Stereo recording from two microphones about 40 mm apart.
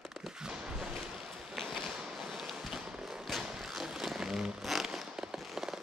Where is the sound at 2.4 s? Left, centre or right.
Centre.